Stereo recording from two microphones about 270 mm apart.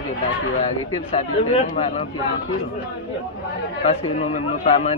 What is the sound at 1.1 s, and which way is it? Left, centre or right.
Speech, left.